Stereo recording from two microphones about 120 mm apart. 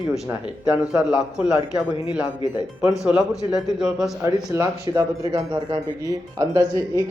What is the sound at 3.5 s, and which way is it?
Speech, centre (ahead or behind).